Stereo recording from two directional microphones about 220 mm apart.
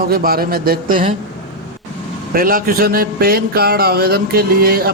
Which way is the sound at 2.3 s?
40° right (ahead or behind).